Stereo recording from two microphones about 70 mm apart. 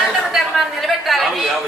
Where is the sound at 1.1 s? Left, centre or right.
Centre.